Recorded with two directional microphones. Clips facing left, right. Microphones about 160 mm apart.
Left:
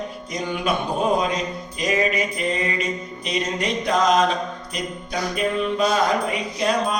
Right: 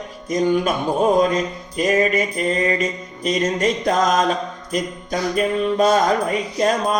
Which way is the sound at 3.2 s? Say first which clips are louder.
Right 6 dB; 45° right (ahead or behind).